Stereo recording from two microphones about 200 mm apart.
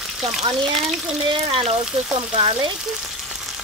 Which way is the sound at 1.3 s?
30° right (ahead or behind).